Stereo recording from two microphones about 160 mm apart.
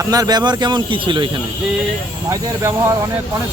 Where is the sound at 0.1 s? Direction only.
25° right (ahead or behind).